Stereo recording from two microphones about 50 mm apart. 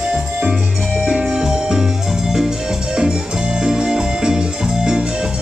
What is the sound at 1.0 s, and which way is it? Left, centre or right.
Music, centre.